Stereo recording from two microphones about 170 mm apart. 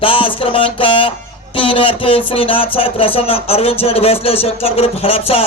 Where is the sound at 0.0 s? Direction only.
30° left (ahead or behind).